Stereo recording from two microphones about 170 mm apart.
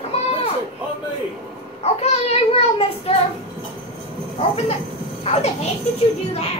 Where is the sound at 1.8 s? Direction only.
40° left (ahead or behind).